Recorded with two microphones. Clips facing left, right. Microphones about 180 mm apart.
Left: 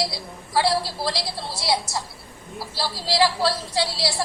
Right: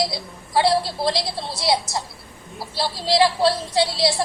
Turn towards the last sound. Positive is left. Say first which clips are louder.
# right 5 dB
turn(degrees=-20)  # may be behind; listen again after turning